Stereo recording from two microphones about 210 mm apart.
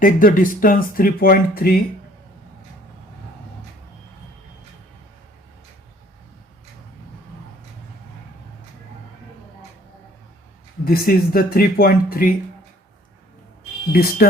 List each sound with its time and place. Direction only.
0.0 s speech: 40° left (ahead or behind)
10.8 s speech: 45° left (ahead or behind)
13.9 s speech: 45° left (ahead or behind)